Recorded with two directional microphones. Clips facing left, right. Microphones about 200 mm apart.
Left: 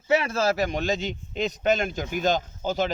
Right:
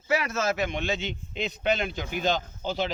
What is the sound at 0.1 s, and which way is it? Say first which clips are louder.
A man's voice: left 4 dB; 30° left (ahead or behind).